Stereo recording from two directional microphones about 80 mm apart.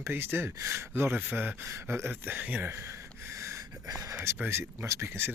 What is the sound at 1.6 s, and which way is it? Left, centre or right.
Speech, right.